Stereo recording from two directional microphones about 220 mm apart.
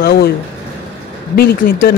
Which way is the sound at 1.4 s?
45° left (ahead or behind).